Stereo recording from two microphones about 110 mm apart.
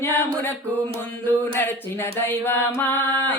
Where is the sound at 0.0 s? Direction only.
20° left (ahead or behind).